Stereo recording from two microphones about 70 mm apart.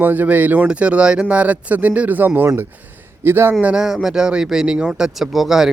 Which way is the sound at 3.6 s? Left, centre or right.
Centre.